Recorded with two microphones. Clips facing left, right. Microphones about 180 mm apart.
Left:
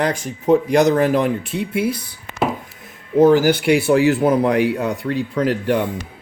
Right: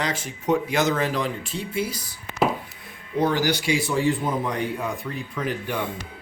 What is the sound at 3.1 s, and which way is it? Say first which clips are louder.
Speech: left 10 dB; 45° left (ahead or behind).